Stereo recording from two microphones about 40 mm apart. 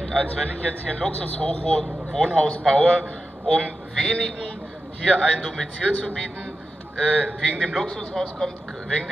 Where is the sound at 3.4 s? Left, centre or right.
Left.